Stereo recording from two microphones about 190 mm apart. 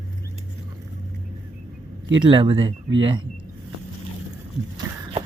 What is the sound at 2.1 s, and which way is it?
Speech, 25° right (ahead or behind).